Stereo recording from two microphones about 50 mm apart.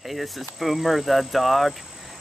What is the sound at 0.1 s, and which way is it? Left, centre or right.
Speech, centre.